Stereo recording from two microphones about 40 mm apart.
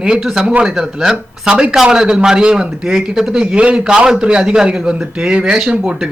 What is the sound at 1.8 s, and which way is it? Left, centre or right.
A man's voice, centre.